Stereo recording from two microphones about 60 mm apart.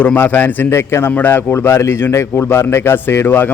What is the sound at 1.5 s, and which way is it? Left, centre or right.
A man's voice, left.